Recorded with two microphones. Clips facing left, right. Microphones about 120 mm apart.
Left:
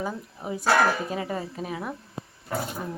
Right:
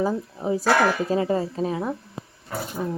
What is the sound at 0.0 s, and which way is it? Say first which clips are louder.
Speech: right 8 dB; 35° right (ahead or behind).